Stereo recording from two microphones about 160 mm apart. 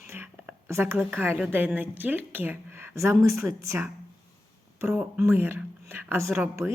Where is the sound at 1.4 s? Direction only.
10° right (ahead or behind).